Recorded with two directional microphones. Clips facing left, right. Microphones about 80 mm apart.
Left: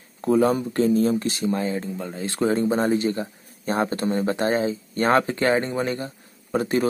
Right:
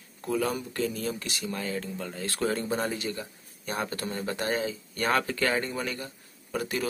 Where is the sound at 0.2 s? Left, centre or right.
Left.